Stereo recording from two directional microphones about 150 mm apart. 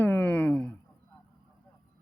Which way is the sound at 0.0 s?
15° left (ahead or behind).